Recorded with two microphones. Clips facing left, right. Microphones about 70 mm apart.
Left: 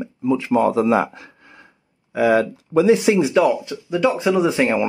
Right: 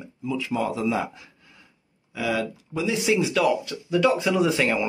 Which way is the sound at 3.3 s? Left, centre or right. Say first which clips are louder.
Left 5 dB; left.